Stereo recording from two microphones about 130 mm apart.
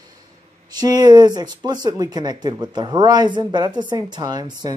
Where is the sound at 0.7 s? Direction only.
30° right (ahead or behind).